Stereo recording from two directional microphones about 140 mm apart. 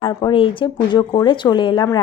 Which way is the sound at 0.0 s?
35° left (ahead or behind).